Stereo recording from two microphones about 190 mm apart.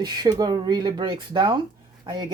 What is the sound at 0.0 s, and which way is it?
Speech, 20° right (ahead or behind).